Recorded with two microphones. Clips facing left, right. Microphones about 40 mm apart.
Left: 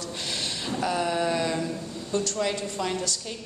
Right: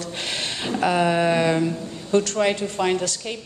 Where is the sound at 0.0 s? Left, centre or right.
Right.